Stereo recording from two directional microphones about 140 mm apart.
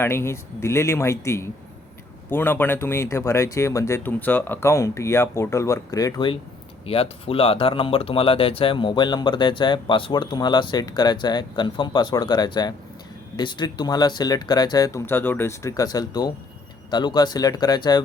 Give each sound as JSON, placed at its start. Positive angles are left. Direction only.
{"t": 0.0, "sound": "speech", "side_deg": 20}